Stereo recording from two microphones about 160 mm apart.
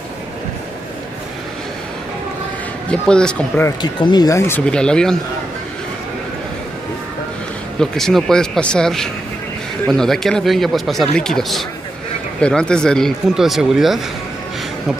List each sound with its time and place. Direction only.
2.9 s speech: 5° left (ahead or behind)
3.6 s speech: 25° left (ahead or behind); by 5.1 s 5° left (ahead or behind)
7.8 s speech: 5° left (ahead or behind)